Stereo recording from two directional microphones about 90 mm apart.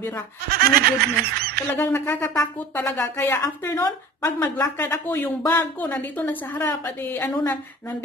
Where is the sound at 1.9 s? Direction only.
25° left (ahead or behind).